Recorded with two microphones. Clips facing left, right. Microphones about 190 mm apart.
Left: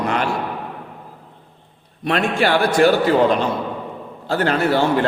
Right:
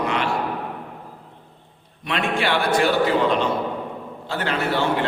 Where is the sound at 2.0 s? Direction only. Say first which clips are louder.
Left 5 dB; 45° left (ahead or behind).